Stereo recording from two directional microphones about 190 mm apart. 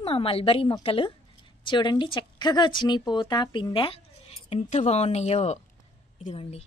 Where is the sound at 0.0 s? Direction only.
30° left (ahead or behind).